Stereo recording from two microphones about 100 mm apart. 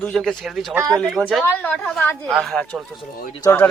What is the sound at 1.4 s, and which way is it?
Speech, 20° left (ahead or behind).